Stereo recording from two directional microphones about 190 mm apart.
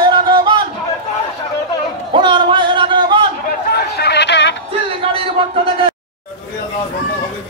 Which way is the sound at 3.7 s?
60° left (ahead or behind).